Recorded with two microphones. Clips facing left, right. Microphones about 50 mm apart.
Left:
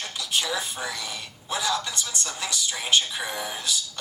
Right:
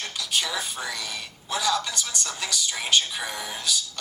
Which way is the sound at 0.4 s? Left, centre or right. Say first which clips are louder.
Left 1 dB; centre.